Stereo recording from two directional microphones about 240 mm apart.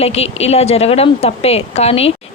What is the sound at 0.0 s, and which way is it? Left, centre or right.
Speech, left.